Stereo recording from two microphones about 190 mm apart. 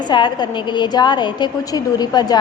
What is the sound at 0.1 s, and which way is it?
A woman's voice, 25° left (ahead or behind).